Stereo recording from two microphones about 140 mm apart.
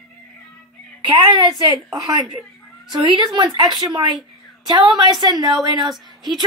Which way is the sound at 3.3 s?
35° right (ahead or behind).